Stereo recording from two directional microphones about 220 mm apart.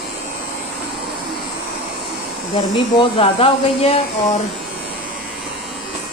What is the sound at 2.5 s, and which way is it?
Speech, 25° left (ahead or behind).